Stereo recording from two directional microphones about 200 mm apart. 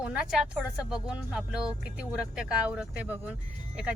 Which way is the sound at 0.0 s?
5° right (ahead or behind).